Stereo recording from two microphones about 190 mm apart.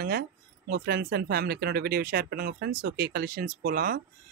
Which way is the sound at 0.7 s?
55° right (ahead or behind).